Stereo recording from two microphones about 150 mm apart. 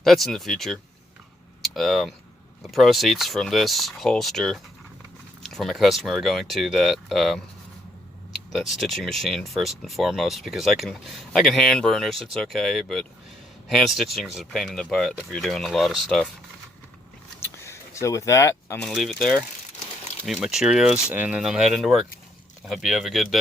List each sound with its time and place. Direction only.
0.0 s speech: centre (ahead or behind)
8.5 s speech: centre (ahead or behind)
17.4 s vehicle: 20° left (ahead or behind)
18.8 s speech: 5° left (ahead or behind)